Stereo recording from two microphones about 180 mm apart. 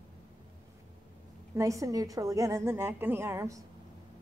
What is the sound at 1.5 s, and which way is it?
A woman's voice, 15° right (ahead or behind).